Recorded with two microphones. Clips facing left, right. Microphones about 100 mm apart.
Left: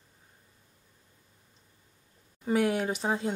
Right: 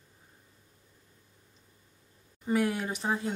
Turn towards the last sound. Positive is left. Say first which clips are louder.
# left 2 dB
turn(degrees=20)  # may be behind; listen again after turning